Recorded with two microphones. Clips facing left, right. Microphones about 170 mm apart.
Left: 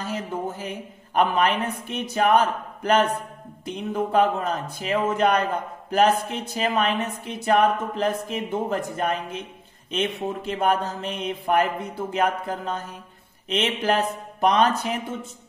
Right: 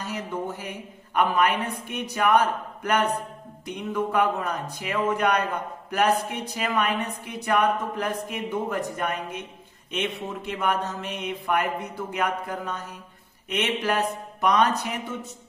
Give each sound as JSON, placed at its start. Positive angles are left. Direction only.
{"t": 0.0, "sound": "a woman's voice", "side_deg": 30}